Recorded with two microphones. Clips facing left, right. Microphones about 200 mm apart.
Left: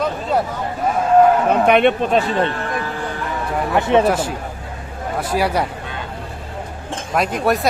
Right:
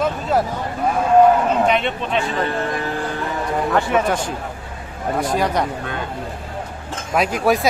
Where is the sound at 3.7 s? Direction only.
20° left (ahead or behind).